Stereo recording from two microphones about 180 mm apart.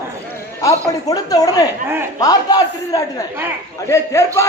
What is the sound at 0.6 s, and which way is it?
A man's voice, 20° left (ahead or behind).